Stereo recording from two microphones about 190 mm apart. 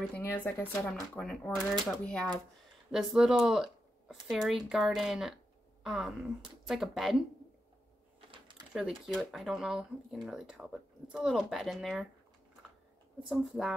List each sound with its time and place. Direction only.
0.0 s speech: 10° left (ahead or behind)
8.3 s a sound: 25° right (ahead or behind)
8.7 s speech: centre (ahead or behind)
13.3 s speech: centre (ahead or behind)